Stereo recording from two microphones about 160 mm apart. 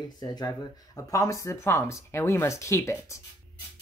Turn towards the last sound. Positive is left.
turn(degrees=20)  # may be behind; listen again after turning